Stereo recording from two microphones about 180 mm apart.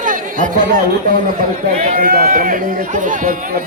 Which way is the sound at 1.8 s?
55° right (ahead or behind).